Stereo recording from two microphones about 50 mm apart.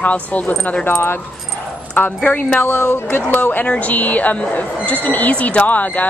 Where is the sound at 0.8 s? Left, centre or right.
Left.